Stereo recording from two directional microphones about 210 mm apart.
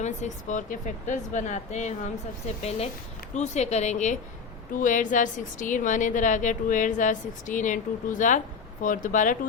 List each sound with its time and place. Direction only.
0.0 s a woman's voice: 35° left (ahead or behind)